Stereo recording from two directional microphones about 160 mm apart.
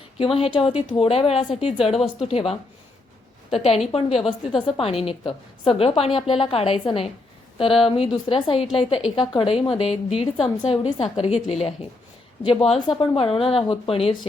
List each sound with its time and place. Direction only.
0.2 s a woman's voice: 35° left (ahead or behind)
11.3 s a woman's voice: 40° left (ahead or behind)